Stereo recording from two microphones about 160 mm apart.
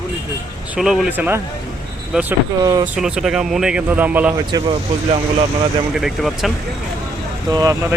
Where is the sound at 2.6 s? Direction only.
25° right (ahead or behind).